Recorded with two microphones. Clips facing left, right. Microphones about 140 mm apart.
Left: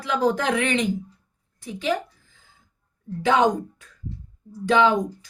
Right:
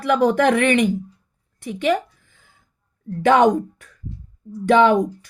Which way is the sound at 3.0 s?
60° right (ahead or behind).